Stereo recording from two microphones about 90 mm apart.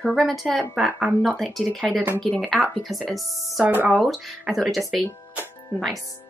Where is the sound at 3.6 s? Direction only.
20° right (ahead or behind).